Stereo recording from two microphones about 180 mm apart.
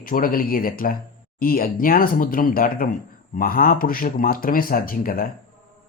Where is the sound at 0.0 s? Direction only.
50° left (ahead or behind).